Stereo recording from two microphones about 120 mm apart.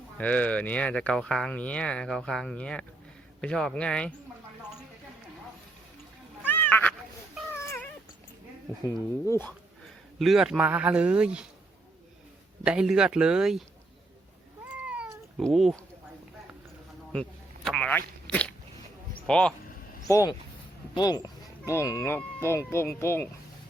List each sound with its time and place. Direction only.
0.2 s speech: 10° left (ahead or behind)
6.5 s cat: 15° left (ahead or behind)
10.2 s a man's voice: 5° right (ahead or behind)
12.6 s a man's voice: 5° right (ahead or behind)
14.8 s cat: 10° right (ahead or behind)
15.4 s speech: 5° left (ahead or behind)
17.1 s a sound: 5° left (ahead or behind)
17.9 s crunch: 10° left (ahead or behind)
19.3 s speech: 10° left (ahead or behind)
20.1 s speech: 25° left (ahead or behind)